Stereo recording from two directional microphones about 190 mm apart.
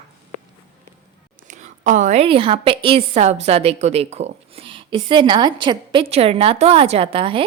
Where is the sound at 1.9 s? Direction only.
40° right (ahead or behind).